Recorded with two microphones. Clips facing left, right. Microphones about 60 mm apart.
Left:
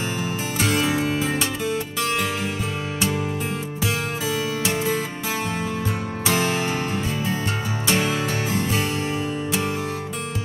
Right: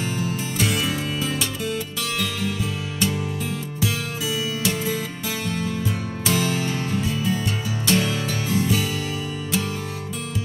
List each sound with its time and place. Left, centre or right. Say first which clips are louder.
0.7 s music: left 5 dB; left
1.4 s music: left 2 dB; left
6.3 s music: left 1 dB; left